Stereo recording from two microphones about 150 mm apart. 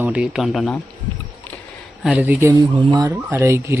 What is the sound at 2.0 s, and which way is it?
Speech, 10° right (ahead or behind).